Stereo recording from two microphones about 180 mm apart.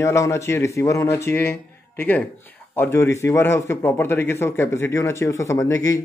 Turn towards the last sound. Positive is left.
turn(degrees=20)  # may be behind; listen again after turning